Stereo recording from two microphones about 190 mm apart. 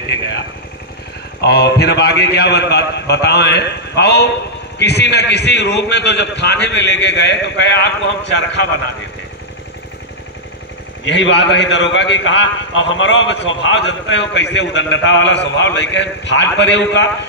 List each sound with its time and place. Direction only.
1.4 s a man's voice: 60° left (ahead or behind)
11.1 s a man's voice: 70° left (ahead or behind)